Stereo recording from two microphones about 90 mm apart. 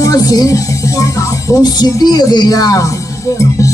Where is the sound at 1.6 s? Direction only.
50° left (ahead or behind).